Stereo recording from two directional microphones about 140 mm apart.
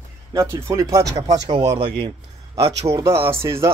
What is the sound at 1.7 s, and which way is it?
Speech, 40° right (ahead or behind).